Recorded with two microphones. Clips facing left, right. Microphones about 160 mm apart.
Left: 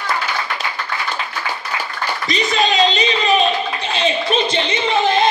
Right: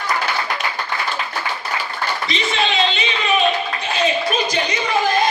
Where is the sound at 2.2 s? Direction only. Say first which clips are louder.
Left 5 dB; 40° left (ahead or behind).